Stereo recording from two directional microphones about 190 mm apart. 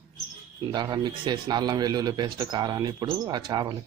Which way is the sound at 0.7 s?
25° right (ahead or behind).